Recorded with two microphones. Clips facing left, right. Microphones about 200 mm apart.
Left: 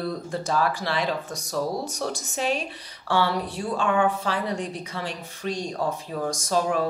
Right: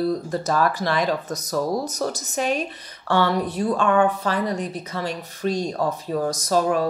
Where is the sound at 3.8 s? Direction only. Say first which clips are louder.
Right 2 dB; 45° right (ahead or behind).